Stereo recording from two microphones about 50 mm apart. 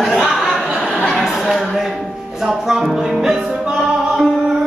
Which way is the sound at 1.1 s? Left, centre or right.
Centre.